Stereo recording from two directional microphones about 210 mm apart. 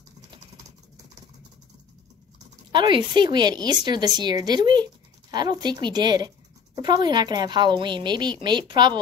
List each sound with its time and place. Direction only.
2.7 s speech: 20° right (ahead or behind)